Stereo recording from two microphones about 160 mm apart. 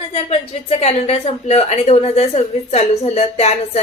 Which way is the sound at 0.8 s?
40° left (ahead or behind).